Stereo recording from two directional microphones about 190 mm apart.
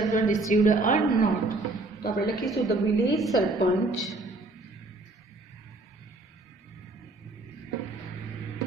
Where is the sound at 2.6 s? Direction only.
Centre (ahead or behind).